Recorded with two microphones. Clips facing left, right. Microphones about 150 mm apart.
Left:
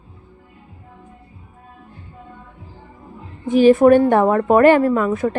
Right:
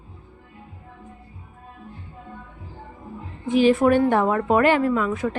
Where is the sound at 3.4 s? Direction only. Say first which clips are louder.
Left 6 dB; 45° left (ahead or behind).